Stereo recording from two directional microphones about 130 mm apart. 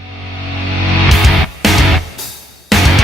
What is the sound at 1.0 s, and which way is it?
Music, centre (ahead or behind).